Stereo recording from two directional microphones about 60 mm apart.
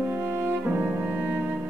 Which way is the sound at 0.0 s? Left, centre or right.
Right.